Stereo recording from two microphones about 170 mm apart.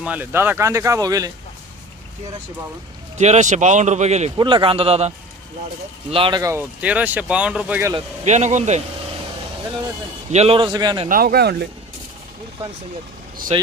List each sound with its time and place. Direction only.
0.0 s speech: 10° right (ahead or behind)
3.2 s speech: 40° right (ahead or behind)
4.4 s a man's voice: 30° right (ahead or behind)
6.4 s speech: 15° right (ahead or behind)
8.2 s speech: 45° right (ahead or behind)
10.3 s a man's voice: 35° right (ahead or behind)
10.7 s a man's voice: 25° right (ahead or behind)
11.1 s speech: 60° right (ahead or behind)
13.5 s a man's voice: 40° right (ahead or behind)